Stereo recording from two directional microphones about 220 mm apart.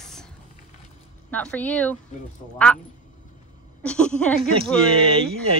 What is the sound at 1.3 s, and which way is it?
Speech, 5° left (ahead or behind).